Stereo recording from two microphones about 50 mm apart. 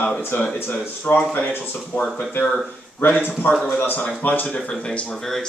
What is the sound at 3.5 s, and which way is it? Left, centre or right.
Speech, left.